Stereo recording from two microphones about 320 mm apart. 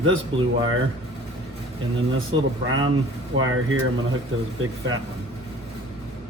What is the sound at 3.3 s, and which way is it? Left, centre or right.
Speech, right.